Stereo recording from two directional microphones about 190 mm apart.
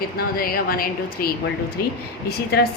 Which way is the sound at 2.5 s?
55° left (ahead or behind).